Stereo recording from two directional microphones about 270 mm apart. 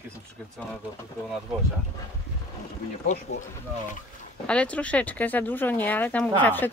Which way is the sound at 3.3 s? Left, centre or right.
Left.